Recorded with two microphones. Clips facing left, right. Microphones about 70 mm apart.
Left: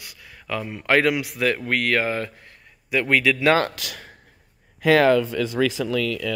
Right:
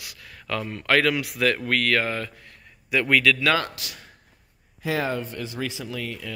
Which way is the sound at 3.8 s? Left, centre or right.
Left.